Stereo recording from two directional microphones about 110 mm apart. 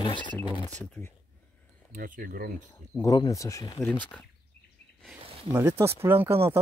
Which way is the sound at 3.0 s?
35° left (ahead or behind).